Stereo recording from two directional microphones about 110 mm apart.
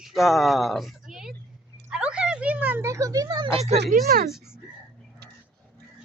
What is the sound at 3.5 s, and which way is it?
Speech, 75° right (ahead or behind).